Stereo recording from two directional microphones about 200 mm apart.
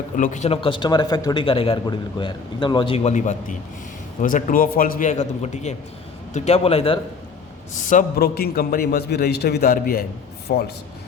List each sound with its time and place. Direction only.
0.2 s a man's voice: 35° left (ahead or behind)
7.7 s a man's voice: 40° left (ahead or behind)